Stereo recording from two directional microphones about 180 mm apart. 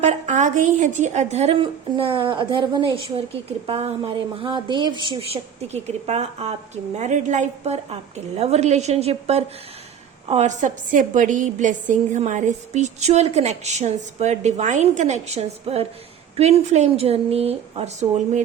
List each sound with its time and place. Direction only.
0.0 s a woman's voice: 40° right (ahead or behind)